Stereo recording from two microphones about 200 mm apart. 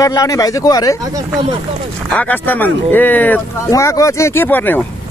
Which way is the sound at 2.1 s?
10° left (ahead or behind).